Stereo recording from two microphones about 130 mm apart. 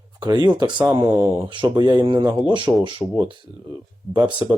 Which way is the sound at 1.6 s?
30° right (ahead or behind).